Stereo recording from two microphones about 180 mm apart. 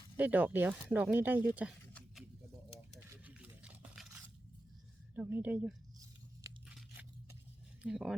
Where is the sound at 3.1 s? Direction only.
10° right (ahead or behind).